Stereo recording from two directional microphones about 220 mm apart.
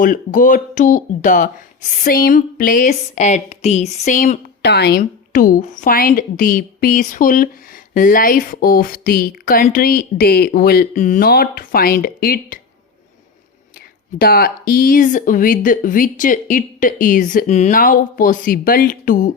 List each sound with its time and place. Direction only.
0.0 s speech: 35° left (ahead or behind)
4.6 s speech: 50° left (ahead or behind)
14.2 s speech: 45° left (ahead or behind)